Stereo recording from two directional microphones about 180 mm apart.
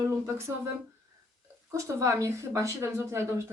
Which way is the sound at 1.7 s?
15° right (ahead or behind).